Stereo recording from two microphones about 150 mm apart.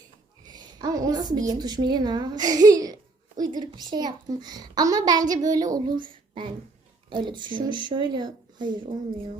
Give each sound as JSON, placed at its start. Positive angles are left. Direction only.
{"t": 0.5, "sound": "a woman's voice", "side_deg": -25}